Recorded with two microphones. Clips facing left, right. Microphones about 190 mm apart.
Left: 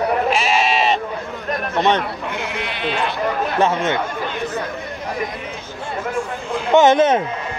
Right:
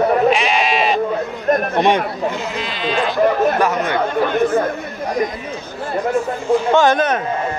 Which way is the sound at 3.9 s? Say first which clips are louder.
Right 7 dB; 50° right (ahead or behind).